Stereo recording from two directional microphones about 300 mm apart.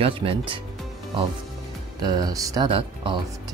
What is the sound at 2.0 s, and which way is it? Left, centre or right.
Speech, centre.